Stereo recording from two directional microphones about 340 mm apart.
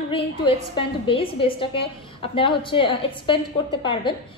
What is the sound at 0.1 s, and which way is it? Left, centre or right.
A woman's voice, centre.